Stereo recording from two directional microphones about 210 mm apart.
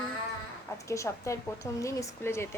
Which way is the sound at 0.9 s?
15° left (ahead or behind).